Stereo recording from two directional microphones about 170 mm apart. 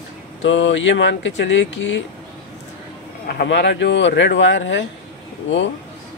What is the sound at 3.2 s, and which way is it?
Speech, 70° left (ahead or behind).